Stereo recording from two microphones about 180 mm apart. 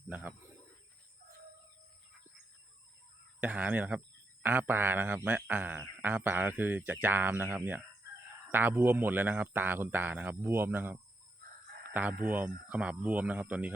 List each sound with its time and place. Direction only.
0.1 s a sound: 10° right (ahead or behind)
3.4 s speech: 10° right (ahead or behind)
11.9 s speech: 10° right (ahead or behind)